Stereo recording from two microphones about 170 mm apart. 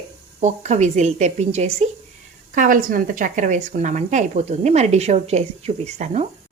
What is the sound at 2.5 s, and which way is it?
A woman's voice, 55° right (ahead or behind).